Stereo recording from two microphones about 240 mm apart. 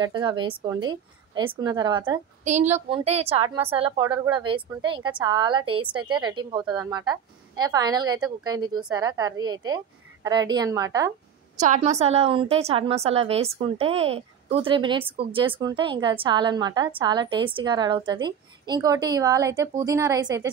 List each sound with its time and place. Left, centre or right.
0.0 s a woman's voice: centre
11.5 s a woman's voice: right; by 20.4 s centre